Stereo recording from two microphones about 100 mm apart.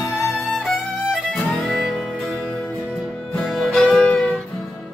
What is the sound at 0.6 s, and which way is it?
Music, centre (ahead or behind).